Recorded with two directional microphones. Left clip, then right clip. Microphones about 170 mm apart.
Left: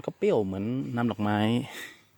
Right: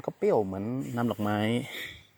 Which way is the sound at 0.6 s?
55° left (ahead or behind).